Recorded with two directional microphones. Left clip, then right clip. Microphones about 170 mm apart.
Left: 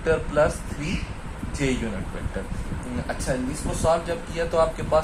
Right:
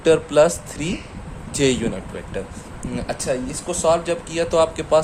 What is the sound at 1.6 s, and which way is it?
Speech, 80° right.